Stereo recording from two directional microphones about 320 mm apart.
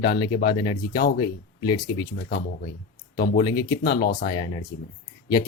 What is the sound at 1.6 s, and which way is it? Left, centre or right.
Speech, centre.